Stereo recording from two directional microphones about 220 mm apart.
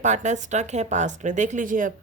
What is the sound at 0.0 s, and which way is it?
Speech, 35° right (ahead or behind).